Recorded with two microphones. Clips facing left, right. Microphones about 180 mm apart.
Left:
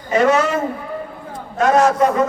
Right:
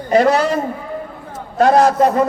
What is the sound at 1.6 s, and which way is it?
Speech, 35° right (ahead or behind).